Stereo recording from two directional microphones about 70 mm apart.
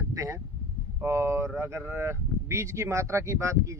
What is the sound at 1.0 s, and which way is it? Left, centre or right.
Speech, right.